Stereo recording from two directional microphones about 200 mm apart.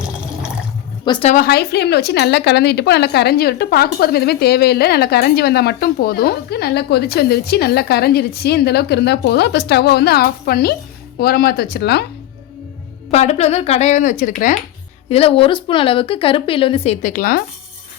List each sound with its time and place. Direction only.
1.0 s a woman's voice: 25° left (ahead or behind)
1.3 s a woman's voice: 50° left (ahead or behind)
13.1 s speech: 30° left (ahead or behind)
15.1 s a woman's voice: 30° left (ahead or behind); by 17.4 s 45° left (ahead or behind)